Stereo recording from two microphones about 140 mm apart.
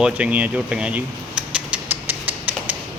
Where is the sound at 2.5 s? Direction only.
10° right (ahead or behind).